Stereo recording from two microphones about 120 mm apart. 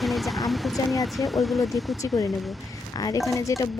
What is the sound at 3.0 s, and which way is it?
Speech, 30° left (ahead or behind).